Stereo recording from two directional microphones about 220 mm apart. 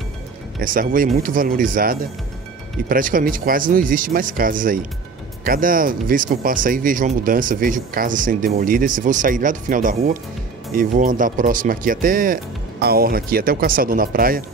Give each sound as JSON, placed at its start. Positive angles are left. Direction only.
{"t": 0.6, "sound": "speech", "side_deg": -40}